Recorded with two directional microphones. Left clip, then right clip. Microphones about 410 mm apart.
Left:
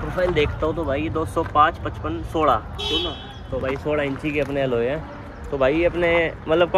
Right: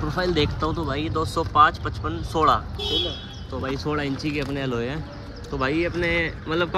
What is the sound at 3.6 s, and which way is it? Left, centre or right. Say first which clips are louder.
Speech: left 4 dB; centre.